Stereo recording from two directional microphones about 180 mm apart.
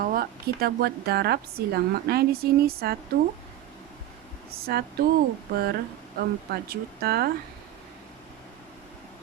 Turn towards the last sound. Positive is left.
turn(degrees=-60)  # may be behind; listen again after turning